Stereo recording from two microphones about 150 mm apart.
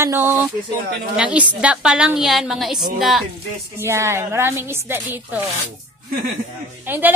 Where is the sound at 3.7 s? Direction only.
20° right (ahead or behind).